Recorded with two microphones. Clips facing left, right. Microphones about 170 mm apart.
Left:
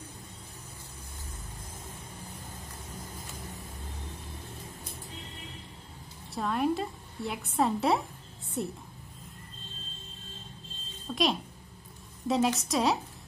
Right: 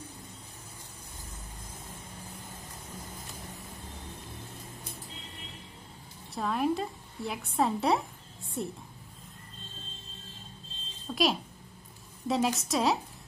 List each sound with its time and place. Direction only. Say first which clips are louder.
6.3 s a woman's voice: even; centre (ahead or behind)
11.1 s a woman's voice: even; centre (ahead or behind)